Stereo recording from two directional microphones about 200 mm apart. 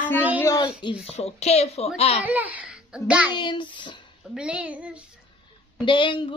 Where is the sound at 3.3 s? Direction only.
25° left (ahead or behind).